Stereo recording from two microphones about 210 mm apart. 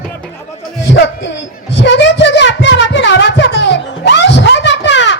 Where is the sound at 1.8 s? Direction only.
55° left (ahead or behind).